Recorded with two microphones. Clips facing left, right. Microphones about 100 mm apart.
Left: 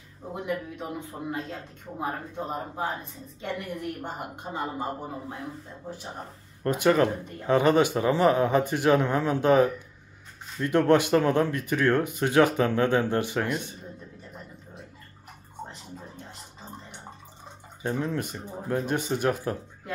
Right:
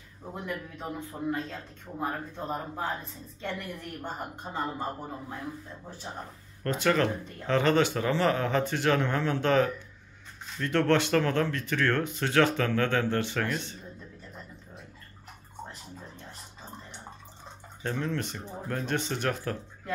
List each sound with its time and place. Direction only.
0.3 s speech: 15° left (ahead or behind)
4.0 s speech: 15° left (ahead or behind)
6.6 s speech: 15° left (ahead or behind)
17.8 s speech: 15° left (ahead or behind)